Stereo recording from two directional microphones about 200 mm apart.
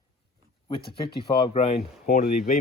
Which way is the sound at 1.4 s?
30° left (ahead or behind).